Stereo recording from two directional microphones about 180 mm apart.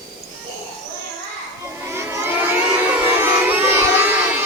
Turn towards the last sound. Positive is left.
turn(degrees=-10)  # may be behind; listen again after turning